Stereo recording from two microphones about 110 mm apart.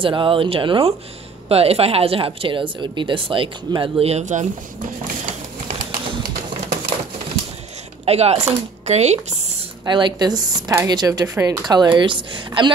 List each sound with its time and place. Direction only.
0.0 s speech: 50° right (ahead or behind)
1.5 s a woman's voice: 65° right (ahead or behind); by 4.5 s 90° right
8.0 s speech: 70° right (ahead or behind); by 9.2 s 90° right
9.8 s a woman's voice: 45° right (ahead or behind)
11.7 s speech: 40° right (ahead or behind)